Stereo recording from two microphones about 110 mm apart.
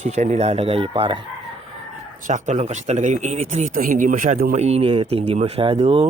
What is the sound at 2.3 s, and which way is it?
Speech, 90° right.